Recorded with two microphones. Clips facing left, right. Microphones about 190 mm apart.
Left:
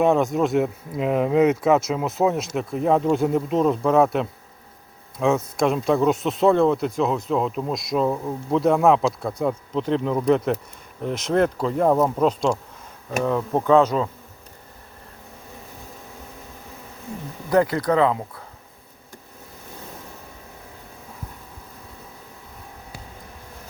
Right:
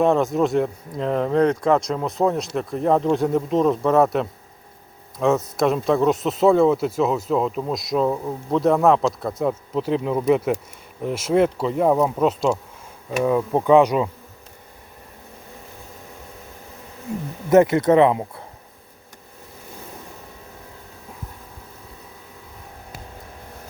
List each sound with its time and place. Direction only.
0.0 s speech: centre (ahead or behind)
17.5 s speech: 20° right (ahead or behind)